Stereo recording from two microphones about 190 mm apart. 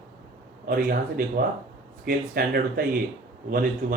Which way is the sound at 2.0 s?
50° right (ahead or behind).